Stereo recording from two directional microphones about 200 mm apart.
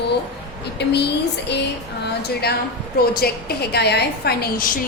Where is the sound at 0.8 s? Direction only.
55° left (ahead or behind).